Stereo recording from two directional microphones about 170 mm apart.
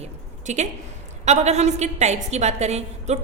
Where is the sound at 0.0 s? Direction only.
45° right (ahead or behind).